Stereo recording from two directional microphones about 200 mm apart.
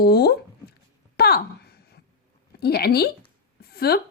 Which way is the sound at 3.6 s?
50° left (ahead or behind).